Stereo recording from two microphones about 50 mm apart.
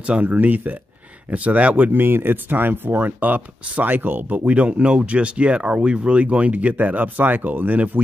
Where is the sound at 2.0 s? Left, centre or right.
Right.